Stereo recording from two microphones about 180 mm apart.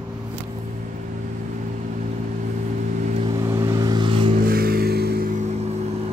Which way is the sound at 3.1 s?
30° right (ahead or behind).